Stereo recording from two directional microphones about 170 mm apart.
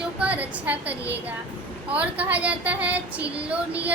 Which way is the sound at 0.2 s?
10° right (ahead or behind).